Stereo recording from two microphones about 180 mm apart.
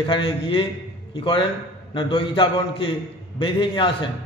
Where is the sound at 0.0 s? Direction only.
30° left (ahead or behind).